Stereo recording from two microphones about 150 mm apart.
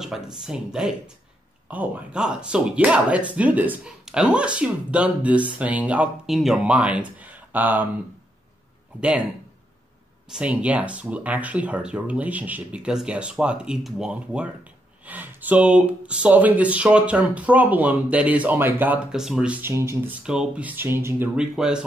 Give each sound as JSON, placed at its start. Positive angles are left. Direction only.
{"t": 0.0, "sound": "speech", "side_deg": -5}
{"t": 10.2, "sound": "speech", "side_deg": -5}
{"t": 20.2, "sound": "speech", "side_deg": -5}